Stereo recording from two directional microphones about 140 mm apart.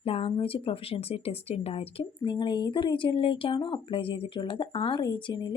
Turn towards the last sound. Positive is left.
turn(degrees=35)  # may be behind; listen again after turning